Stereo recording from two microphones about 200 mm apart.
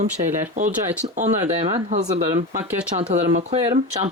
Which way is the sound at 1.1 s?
35° right (ahead or behind).